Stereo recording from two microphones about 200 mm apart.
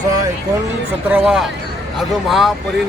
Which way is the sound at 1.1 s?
5° right (ahead or behind).